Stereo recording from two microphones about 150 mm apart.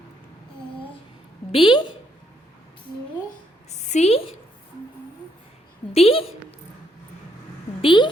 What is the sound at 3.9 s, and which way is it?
Speech, 45° left (ahead or behind).